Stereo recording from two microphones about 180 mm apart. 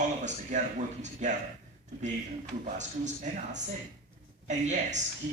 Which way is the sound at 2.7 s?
40° right (ahead or behind).